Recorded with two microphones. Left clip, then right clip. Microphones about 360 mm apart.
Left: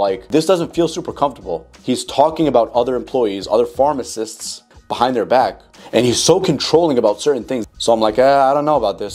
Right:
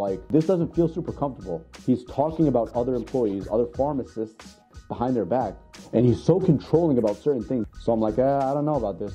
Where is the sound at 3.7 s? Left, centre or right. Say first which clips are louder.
Left 10 dB; centre.